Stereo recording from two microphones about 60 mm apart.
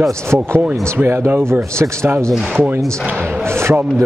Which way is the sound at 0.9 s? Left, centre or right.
Right.